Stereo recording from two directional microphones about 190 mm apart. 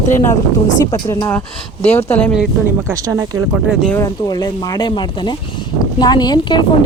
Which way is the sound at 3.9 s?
20° left (ahead or behind).